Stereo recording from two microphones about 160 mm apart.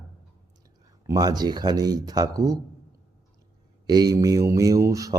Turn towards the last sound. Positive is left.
turn(degrees=-20)  # may be behind; listen again after turning